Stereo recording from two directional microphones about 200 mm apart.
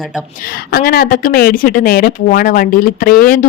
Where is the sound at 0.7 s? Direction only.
50° left (ahead or behind).